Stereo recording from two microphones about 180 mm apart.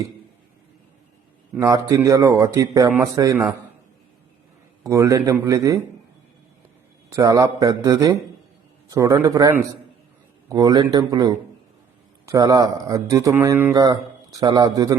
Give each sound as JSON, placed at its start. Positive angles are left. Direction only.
{"t": 1.5, "sound": "speech", "side_deg": -15}
{"t": 4.8, "sound": "speech", "side_deg": -15}
{"t": 7.1, "sound": "speech", "side_deg": -20}